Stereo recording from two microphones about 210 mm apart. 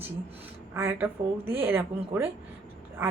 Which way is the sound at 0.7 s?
10° right (ahead or behind).